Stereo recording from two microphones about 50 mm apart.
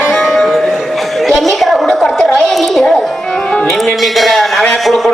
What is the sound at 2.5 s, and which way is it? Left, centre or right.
Music, centre.